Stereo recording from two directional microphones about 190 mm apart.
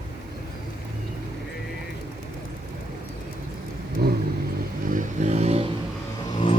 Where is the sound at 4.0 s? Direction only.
55° right (ahead or behind).